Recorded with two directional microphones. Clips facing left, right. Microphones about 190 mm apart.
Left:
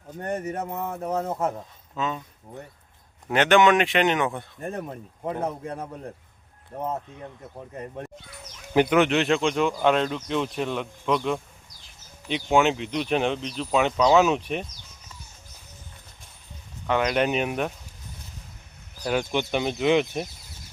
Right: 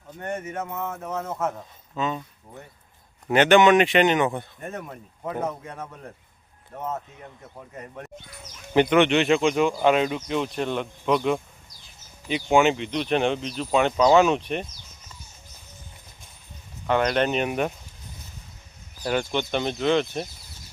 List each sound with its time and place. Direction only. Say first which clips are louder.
0.2 s a man's voice: left 2 dB; 35° left (ahead or behind)
2.0 s speech: right 2 dB; centre (ahead or behind)
3.2 s speech: right 2 dB; centre (ahead or behind)
4.6 s a man's voice: left 3 dB; 30° left (ahead or behind)
8.7 s speech: right 1 dB; 5° left (ahead or behind)
16.8 s speech: right 1 dB; centre (ahead or behind)
19.3 s speech: even; 10° left (ahead or behind)